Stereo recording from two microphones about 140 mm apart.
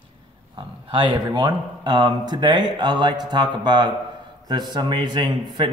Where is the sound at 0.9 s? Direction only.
35° right (ahead or behind).